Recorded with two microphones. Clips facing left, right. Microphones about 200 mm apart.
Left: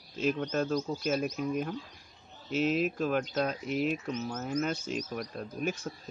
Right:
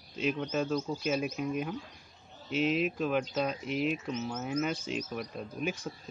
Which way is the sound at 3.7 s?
45° left (ahead or behind).